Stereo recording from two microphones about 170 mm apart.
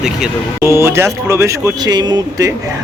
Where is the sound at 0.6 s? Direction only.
15° right (ahead or behind).